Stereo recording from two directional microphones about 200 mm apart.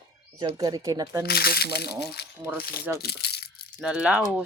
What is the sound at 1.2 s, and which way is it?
Speech, 50° left (ahead or behind).